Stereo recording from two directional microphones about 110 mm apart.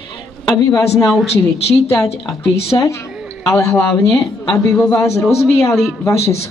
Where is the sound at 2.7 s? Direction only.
40° left (ahead or behind).